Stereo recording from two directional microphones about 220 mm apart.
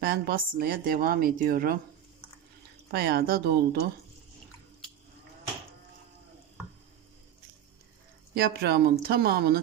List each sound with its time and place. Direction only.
0.0 s speech: 45° right (ahead or behind)
2.9 s speech: 45° right (ahead or behind)
8.4 s speech: 45° right (ahead or behind)